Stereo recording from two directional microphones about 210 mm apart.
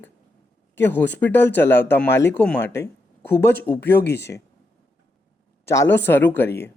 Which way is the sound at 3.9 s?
50° left (ahead or behind).